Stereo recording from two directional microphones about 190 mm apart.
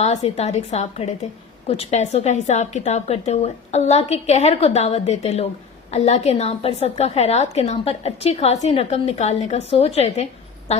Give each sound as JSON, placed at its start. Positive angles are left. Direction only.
{"t": 0.0, "sound": "a woman's voice", "side_deg": 35}